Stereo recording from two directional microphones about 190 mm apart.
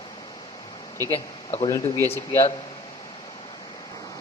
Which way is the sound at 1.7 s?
15° left (ahead or behind).